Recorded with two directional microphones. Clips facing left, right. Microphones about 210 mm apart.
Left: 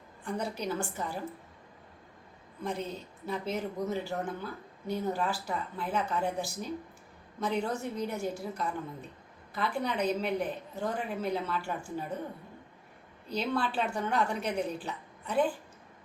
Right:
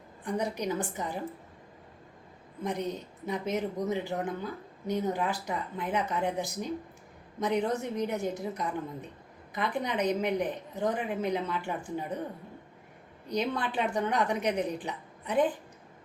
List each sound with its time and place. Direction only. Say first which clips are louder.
0.3 s speech: right 3 dB; 15° right (ahead or behind)
2.6 s a woman's voice: right 3 dB; 15° right (ahead or behind)
13.2 s speech: right 1 dB; 15° right (ahead or behind)